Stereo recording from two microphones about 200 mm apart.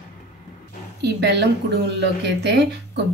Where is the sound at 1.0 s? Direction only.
55° right (ahead or behind).